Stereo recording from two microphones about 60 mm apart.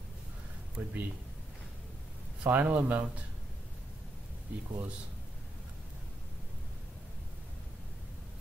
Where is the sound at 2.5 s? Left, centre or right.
Right.